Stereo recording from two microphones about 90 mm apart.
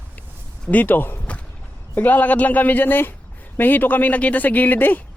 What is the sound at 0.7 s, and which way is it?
Speech, 20° left (ahead or behind).